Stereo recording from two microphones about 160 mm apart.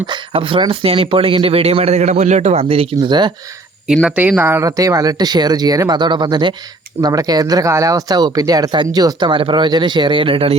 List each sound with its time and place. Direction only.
0.0 s speech: 30° right (ahead or behind)
3.8 s speech: 5° right (ahead or behind); by 10.6 s 35° right (ahead or behind)